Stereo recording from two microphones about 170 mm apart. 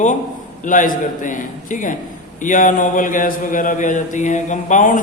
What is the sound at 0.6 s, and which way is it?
Speech, 50° left (ahead or behind).